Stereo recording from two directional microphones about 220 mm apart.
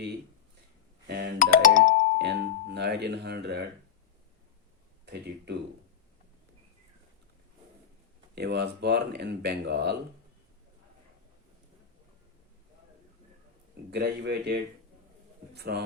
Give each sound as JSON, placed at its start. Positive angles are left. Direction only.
{"t": 1.0, "sound": "music", "side_deg": -45}
{"t": 1.4, "sound": "music", "side_deg": 35}
{"t": 2.1, "sound": "speech", "side_deg": -50}
{"t": 5.1, "sound": "speech", "side_deg": -50}
{"t": 8.4, "sound": "speech", "side_deg": -50}
{"t": 13.9, "sound": "speech", "side_deg": -50}